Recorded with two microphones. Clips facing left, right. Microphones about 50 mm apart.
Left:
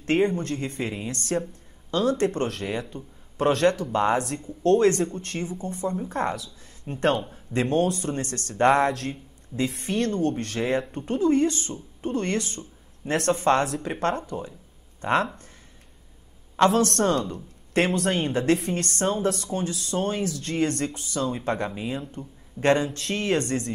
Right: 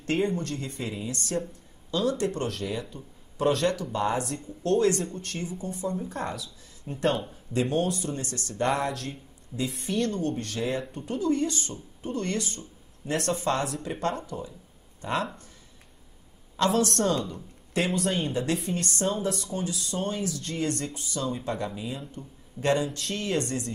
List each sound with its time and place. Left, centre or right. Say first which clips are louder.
0.0 s speech: left 4 dB; left
9.8 s speech: left 2 dB; left
16.8 s speech: left 3 dB; left